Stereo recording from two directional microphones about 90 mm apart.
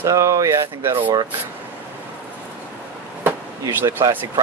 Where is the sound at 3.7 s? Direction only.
25° right (ahead or behind).